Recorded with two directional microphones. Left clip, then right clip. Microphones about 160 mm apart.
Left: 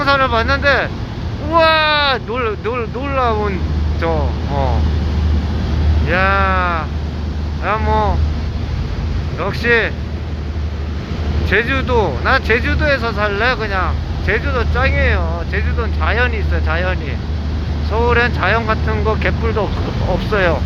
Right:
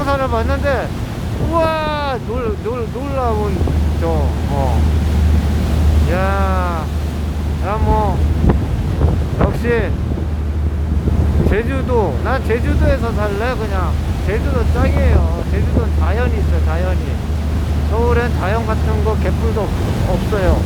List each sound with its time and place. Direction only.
0.0 s speech: 5° right (ahead or behind)
6.1 s speech: 5° left (ahead or behind)
9.6 s speech: 5° right (ahead or behind)
11.5 s speech: 5° right (ahead or behind)
17.9 s speech: 5° left (ahead or behind)
20.3 s speech: 15° left (ahead or behind)